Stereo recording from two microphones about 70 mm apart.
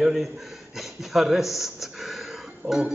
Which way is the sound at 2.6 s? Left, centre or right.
Right.